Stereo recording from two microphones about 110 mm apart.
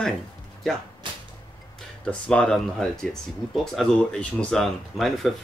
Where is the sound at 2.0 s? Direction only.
5° left (ahead or behind).